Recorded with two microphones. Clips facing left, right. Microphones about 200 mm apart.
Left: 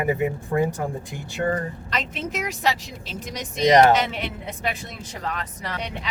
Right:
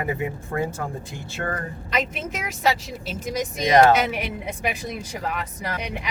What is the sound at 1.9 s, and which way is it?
Speech, 5° right (ahead or behind).